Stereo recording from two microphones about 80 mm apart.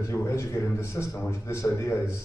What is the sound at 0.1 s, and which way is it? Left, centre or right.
A man's voice, left.